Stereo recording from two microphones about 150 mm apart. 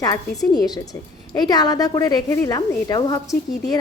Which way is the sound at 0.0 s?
25° left (ahead or behind).